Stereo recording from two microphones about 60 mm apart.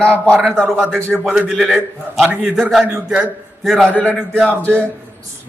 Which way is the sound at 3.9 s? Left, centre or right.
Left.